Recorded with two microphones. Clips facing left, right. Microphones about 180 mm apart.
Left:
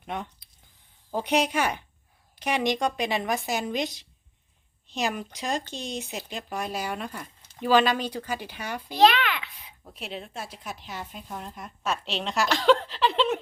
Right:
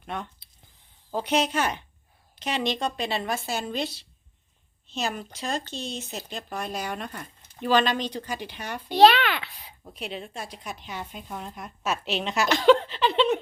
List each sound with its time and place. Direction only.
1.1 s speech: 15° left (ahead or behind)
9.0 s a sound: 35° right (ahead or behind)
9.8 s speech: centre (ahead or behind)